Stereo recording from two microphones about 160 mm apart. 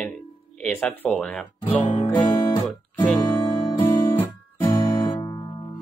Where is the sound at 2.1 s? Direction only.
25° left (ahead or behind).